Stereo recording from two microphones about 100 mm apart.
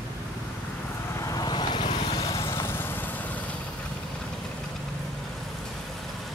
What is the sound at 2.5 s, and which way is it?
Vehicle, 25° left (ahead or behind).